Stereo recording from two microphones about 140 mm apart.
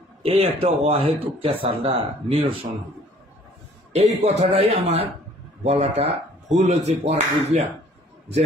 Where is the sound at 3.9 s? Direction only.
50° right (ahead or behind).